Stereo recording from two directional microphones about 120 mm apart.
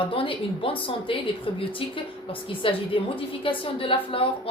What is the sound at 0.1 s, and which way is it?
A woman's voice, 45° left (ahead or behind).